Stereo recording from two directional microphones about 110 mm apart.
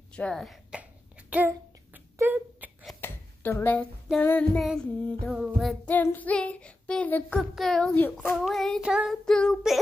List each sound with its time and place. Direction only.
0.1 s speech: 5° left (ahead or behind)
0.7 s cough: 10° right (ahead or behind)
2.1 s a sound: 20° right (ahead or behind)
3.0 s a sound: 20° left (ahead or behind)
4.2 s child singing: 15° left (ahead or behind)
4.6 s child singing: 5° left (ahead or behind)
5.9 s child singing: 15° left (ahead or behind)
7.3 s child singing: centre (ahead or behind)
9.1 s child singing: 5° left (ahead or behind)